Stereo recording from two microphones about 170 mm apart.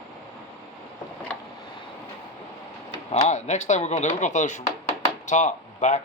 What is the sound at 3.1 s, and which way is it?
Speech, 40° left (ahead or behind).